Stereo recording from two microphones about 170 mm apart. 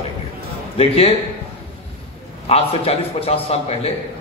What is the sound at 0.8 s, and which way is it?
Speech, 35° left (ahead or behind).